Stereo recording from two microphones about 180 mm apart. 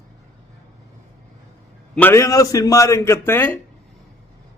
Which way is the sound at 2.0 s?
15° left (ahead or behind).